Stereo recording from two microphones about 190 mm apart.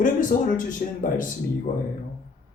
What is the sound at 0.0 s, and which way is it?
Speech, 45° left (ahead or behind).